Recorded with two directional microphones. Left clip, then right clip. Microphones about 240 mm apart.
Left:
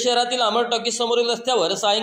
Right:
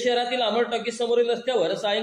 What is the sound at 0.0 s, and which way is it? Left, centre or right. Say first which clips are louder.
A man's voice: left 3 dB; left.